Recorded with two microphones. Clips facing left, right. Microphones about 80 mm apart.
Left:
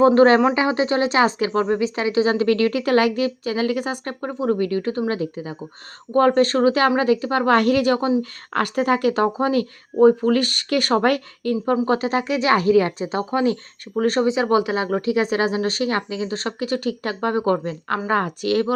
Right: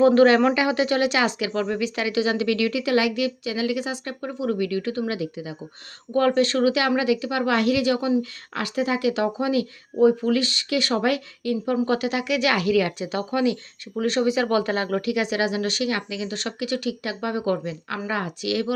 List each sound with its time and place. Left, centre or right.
0.0 s speech: left
14.3 s a woman's voice: left
15.0 s speech: left